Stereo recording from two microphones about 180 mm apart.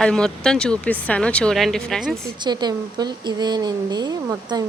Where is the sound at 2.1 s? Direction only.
20° right (ahead or behind).